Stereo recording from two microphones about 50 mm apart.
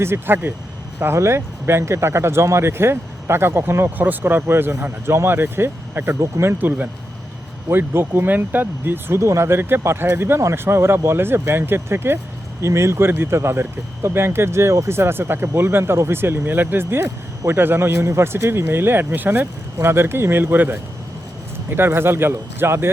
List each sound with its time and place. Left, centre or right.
0.0 s speech: right
3.8 s speech: right
6.1 s speech: right
6.6 s speech: right
9.2 s speech: right
9.6 s speech: right
9.8 s speech: right
12.6 s speech: right
20.4 s speech: right